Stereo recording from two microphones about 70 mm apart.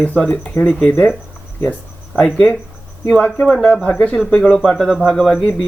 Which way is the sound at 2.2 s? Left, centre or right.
Centre.